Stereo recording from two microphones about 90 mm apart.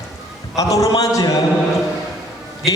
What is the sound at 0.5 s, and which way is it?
Music, 40° left (ahead or behind).